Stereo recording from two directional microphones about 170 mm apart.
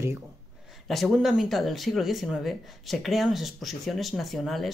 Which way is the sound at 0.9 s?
Centre (ahead or behind).